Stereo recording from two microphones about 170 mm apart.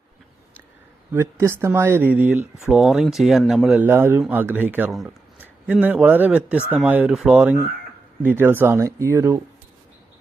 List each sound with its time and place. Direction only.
1.1 s speech: 15° right (ahead or behind)